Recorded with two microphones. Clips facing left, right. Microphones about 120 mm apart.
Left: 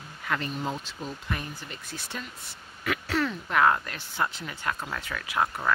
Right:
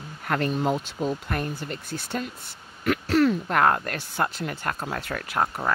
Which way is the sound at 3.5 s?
50° right (ahead or behind).